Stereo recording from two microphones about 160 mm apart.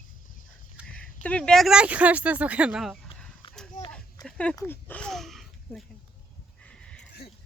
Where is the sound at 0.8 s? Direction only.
5° right (ahead or behind).